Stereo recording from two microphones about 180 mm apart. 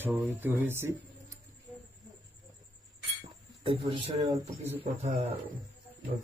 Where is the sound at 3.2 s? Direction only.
30° right (ahead or behind).